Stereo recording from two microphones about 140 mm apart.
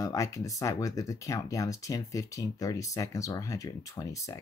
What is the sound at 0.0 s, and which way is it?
Speech, 25° left (ahead or behind).